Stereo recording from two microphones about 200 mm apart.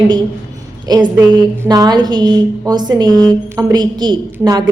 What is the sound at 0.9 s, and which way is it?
A woman's voice, 20° right (ahead or behind).